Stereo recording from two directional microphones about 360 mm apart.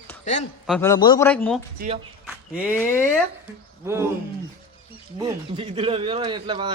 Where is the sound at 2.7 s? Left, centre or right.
Centre.